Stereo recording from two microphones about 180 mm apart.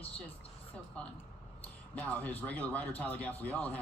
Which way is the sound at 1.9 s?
10° left (ahead or behind).